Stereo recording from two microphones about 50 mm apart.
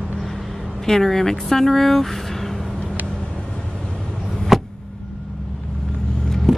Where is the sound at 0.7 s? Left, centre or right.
Centre.